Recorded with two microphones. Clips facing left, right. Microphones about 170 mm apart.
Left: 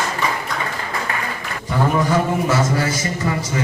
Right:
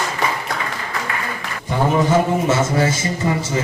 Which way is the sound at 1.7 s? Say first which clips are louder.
Right 2 dB; 25° right (ahead or behind).